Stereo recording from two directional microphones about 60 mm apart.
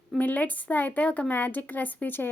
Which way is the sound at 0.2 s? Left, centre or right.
Left.